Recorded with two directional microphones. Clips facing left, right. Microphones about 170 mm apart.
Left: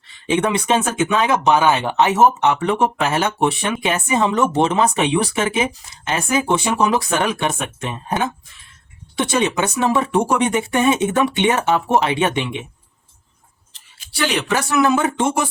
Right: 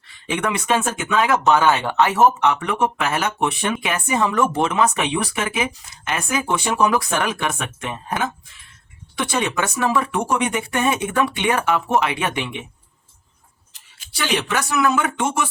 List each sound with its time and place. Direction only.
0.3 s speech: 25° left (ahead or behind)
14.5 s speech: 30° left (ahead or behind)